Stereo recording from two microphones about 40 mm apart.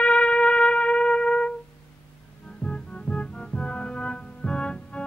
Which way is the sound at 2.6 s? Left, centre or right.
Left.